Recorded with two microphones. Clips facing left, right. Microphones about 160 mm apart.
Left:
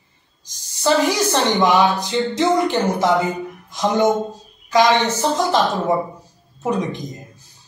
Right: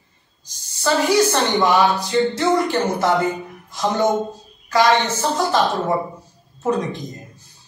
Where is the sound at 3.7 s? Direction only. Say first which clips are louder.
Left 2 dB; 15° left (ahead or behind).